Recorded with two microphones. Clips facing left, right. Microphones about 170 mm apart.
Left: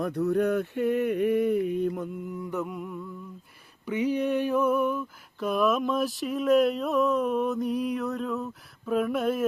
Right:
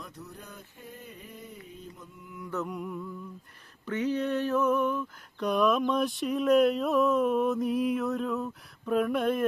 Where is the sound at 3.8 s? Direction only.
10° left (ahead or behind).